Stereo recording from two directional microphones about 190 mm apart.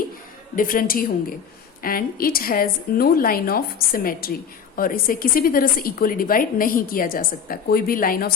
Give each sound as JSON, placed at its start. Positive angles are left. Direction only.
{"t": 0.5, "sound": "a woman's voice", "side_deg": 45}